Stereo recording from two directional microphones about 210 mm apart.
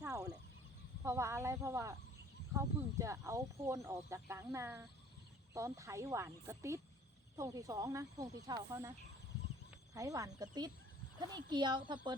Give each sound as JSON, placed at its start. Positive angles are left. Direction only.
{"t": 0.0, "sound": "fowl", "side_deg": -15}
{"t": 1.0, "sound": "speech", "side_deg": -15}
{"t": 9.9, "sound": "speech", "side_deg": -15}